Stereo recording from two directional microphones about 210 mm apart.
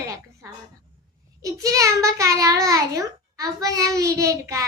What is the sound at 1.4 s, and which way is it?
A child's voice, 15° right (ahead or behind).